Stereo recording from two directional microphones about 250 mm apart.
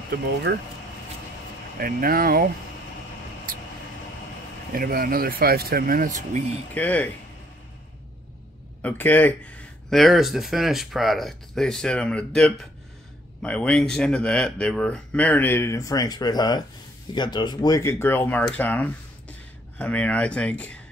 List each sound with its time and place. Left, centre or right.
0.1 s speech: right
1.8 s speech: right
4.7 s speech: right
6.7 s speech: centre
8.8 s speech: centre